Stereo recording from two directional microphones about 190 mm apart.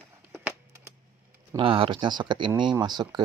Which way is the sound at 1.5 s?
25° right (ahead or behind).